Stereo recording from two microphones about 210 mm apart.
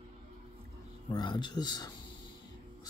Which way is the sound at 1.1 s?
20° left (ahead or behind).